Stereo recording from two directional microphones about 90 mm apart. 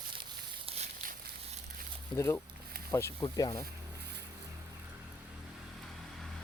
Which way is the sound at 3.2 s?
45° left (ahead or behind).